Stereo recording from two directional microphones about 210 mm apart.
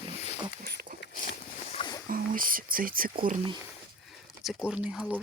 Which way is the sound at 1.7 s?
20° left (ahead or behind).